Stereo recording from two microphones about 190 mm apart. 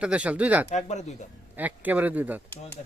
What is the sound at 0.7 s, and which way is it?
Speech, 35° left (ahead or behind).